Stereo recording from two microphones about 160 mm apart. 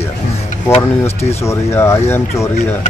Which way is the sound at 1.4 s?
15° left (ahead or behind).